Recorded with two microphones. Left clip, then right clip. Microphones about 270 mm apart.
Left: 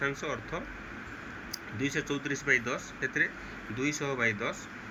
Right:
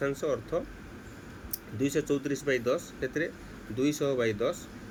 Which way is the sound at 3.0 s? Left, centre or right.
Centre.